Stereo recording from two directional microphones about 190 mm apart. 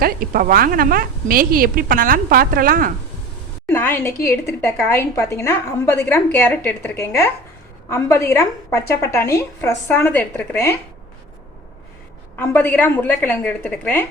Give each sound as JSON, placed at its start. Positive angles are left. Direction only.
{"t": 0.0, "sound": "a woman's voice", "side_deg": -50}
{"t": 3.7, "sound": "a woman's voice", "side_deg": 10}
{"t": 12.4, "sound": "a woman's voice", "side_deg": 10}